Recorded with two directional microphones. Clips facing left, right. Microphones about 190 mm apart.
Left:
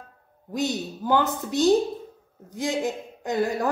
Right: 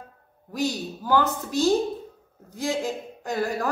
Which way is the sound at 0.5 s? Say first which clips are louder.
Even; 20° left (ahead or behind).